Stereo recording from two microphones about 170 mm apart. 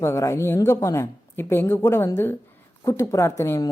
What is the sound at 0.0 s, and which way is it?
Speech, 15° left (ahead or behind).